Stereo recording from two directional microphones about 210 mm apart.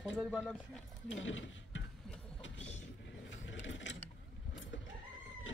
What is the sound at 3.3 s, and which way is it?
Vehicle, 60° left (ahead or behind).